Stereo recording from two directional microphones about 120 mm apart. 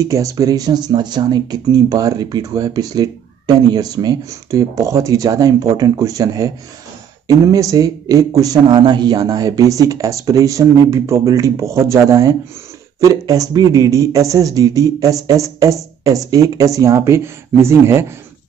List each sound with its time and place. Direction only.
0.0 s speech: 25° right (ahead or behind)